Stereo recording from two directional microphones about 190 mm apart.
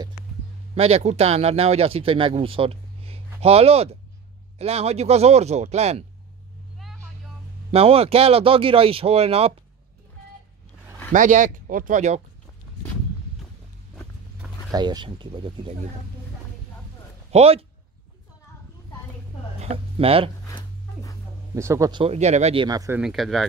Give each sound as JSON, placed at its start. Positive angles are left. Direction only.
{"t": 0.7, "sound": "speech", "side_deg": -30}
{"t": 7.7, "sound": "speech", "side_deg": -30}
{"t": 11.1, "sound": "speech", "side_deg": -40}
{"t": 14.7, "sound": "speech", "side_deg": -20}
{"t": 17.3, "sound": "speech", "side_deg": -30}
{"t": 19.6, "sound": "speech", "side_deg": -30}
{"t": 20.4, "sound": "a sound", "side_deg": 20}
{"t": 21.5, "sound": "speech", "side_deg": -15}
{"t": 22.0, "sound": "speech", "side_deg": -35}
{"t": 22.7, "sound": "speech", "side_deg": -20}
{"t": 22.9, "sound": "speech", "side_deg": 0}